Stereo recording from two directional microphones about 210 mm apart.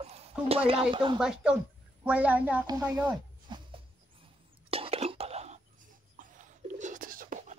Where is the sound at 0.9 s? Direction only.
25° right (ahead or behind).